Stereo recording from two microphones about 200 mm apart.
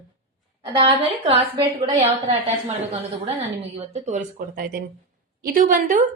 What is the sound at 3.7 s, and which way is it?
A woman's voice, 35° right (ahead or behind).